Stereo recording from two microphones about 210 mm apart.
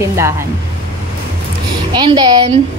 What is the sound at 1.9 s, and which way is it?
Speech, 25° right (ahead or behind).